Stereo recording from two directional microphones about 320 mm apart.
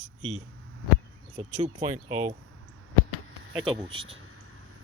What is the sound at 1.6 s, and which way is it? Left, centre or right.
Speech, right.